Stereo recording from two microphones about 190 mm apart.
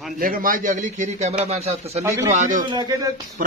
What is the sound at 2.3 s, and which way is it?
Speech, 40° right (ahead or behind).